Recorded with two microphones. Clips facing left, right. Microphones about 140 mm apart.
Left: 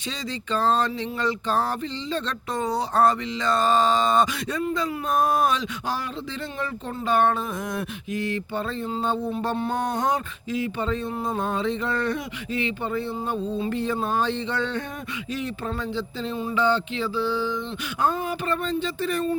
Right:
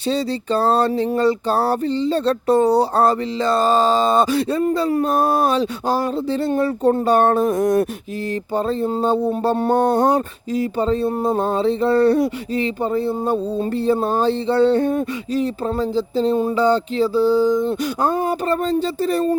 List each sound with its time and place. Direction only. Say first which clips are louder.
0.1 s mantra: right 9 dB; 35° right (ahead or behind)